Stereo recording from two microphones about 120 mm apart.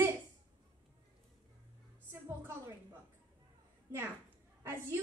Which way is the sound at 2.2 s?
20° right (ahead or behind).